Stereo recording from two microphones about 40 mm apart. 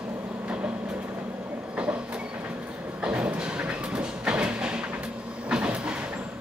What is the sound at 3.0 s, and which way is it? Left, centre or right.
Train, right.